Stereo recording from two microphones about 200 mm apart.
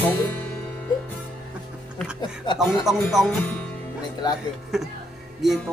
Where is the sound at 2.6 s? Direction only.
Centre (ahead or behind).